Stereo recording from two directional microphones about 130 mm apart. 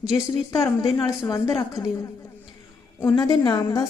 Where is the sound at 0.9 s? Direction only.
30° left (ahead or behind).